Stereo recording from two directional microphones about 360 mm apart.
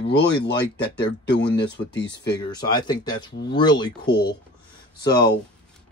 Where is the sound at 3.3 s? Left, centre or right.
Left.